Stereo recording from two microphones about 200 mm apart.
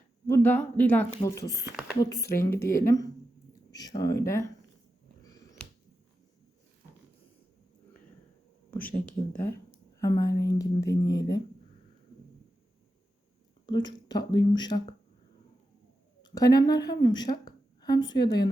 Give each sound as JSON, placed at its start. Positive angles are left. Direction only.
{"t": 0.3, "sound": "speech", "side_deg": 10}
{"t": 1.5, "sound": "speech", "side_deg": -10}
{"t": 2.0, "sound": "speech", "side_deg": 20}
{"t": 5.2, "sound": "a sound", "side_deg": 15}
{"t": 8.7, "sound": "speech", "side_deg": 5}
{"t": 11.0, "sound": "speech", "side_deg": 55}
{"t": 13.7, "sound": "speech", "side_deg": 20}
{"t": 16.2, "sound": "a woman's voice", "side_deg": 20}